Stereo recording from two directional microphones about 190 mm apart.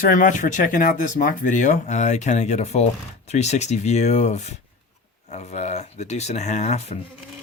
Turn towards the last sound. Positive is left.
turn(degrees=35)  # may be behind; listen again after turning